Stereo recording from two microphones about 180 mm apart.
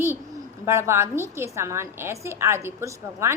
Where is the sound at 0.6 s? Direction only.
15° right (ahead or behind).